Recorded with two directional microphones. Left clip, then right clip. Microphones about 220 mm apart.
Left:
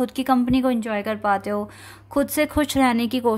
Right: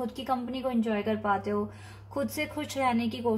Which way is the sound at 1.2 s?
50° left (ahead or behind).